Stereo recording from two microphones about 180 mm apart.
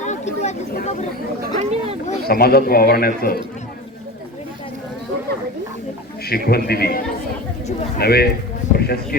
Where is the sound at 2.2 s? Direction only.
55° left (ahead or behind).